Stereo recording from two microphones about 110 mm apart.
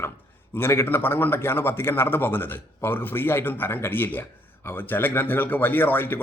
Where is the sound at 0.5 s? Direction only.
20° left (ahead or behind).